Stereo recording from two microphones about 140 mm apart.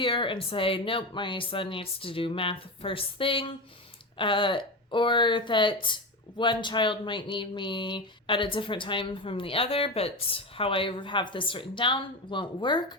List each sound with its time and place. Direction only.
0.0 s speech: 35° left (ahead or behind)